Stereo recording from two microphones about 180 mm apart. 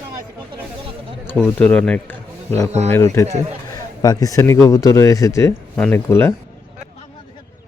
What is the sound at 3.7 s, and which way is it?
A man's voice, 20° left (ahead or behind).